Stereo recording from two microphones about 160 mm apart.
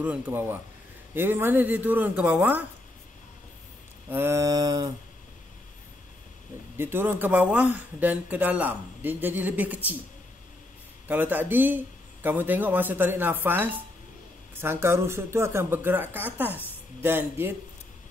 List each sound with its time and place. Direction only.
0.0 s speech: 10° right (ahead or behind)
4.1 s mantra: 15° right (ahead or behind)
6.8 s speech: 15° right (ahead or behind)
11.1 s speech: 10° right (ahead or behind)